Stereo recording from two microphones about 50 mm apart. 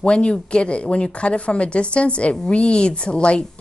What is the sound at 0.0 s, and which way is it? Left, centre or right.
A woman's voice, centre.